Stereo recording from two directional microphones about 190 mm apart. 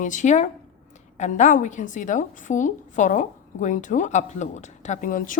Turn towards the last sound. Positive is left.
turn(degrees=45)  # may be behind; listen again after turning